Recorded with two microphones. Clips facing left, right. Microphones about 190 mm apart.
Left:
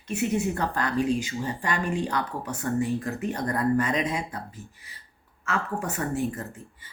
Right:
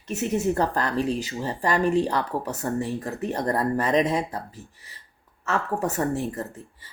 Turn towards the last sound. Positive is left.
turn(degrees=-40)  # may be behind; listen again after turning